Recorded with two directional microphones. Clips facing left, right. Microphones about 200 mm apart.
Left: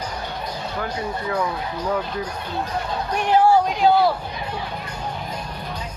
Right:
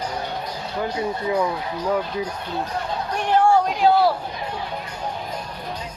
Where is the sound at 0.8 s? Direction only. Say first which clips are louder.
Right 4 dB; 20° right (ahead or behind).